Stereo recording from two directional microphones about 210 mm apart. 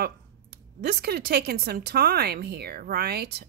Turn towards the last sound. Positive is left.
turn(degrees=-50)  # may be behind; listen again after turning